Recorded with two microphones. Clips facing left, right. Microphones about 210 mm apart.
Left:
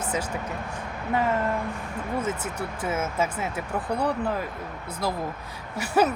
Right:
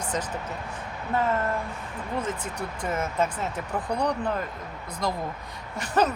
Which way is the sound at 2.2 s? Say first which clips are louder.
Left 2 dB; 5° left (ahead or behind).